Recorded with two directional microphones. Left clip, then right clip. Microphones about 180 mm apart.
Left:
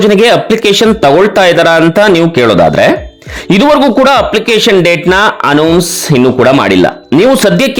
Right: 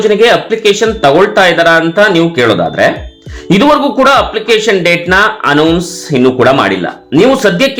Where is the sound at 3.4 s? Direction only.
50° left (ahead or behind).